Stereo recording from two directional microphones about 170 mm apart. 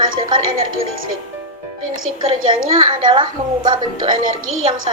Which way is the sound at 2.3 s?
30° right (ahead or behind).